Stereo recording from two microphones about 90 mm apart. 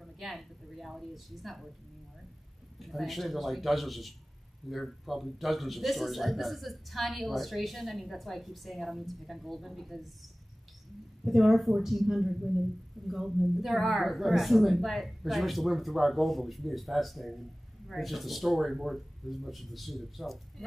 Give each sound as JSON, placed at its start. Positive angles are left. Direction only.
{"t": 0.0, "sound": "a woman's voice", "side_deg": 0}
{"t": 2.8, "sound": "a man's voice", "side_deg": 0}
{"t": 11.2, "sound": "a man's voice", "side_deg": 0}